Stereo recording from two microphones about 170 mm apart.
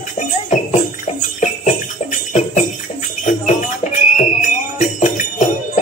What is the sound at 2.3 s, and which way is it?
Music, 45° left (ahead or behind).